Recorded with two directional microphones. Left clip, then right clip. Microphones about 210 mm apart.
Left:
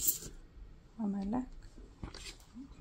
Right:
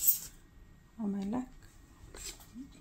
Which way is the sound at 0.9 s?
10° left (ahead or behind).